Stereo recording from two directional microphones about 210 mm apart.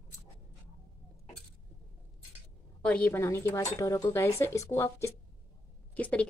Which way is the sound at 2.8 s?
5° left (ahead or behind).